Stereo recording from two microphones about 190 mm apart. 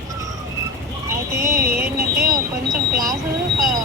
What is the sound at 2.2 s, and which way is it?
Speech, 50° right (ahead or behind).